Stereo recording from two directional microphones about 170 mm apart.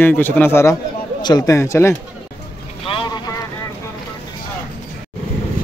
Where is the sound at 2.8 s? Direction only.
30° left (ahead or behind).